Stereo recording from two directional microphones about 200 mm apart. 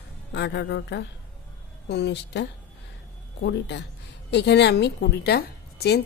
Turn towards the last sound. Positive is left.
turn(degrees=55)  # may be behind; listen again after turning